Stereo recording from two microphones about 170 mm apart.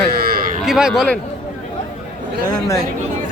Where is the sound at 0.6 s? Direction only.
5° right (ahead or behind).